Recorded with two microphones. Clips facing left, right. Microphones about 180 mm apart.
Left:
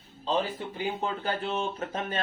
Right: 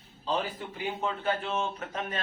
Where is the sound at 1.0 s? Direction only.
35° left (ahead or behind).